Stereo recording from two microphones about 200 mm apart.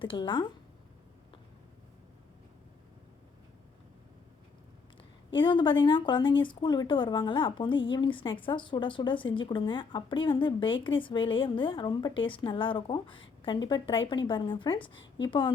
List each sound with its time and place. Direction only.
0.0 s speech: 25° left (ahead or behind)
5.3 s speech: 25° left (ahead or behind)